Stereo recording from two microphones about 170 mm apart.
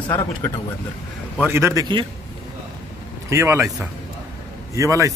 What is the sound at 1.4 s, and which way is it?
Speech, 15° right (ahead or behind).